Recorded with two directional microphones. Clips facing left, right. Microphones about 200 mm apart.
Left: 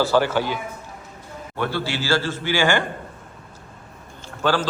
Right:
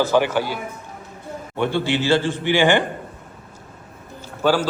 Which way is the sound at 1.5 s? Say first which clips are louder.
Right 5 dB; 15° right (ahead or behind).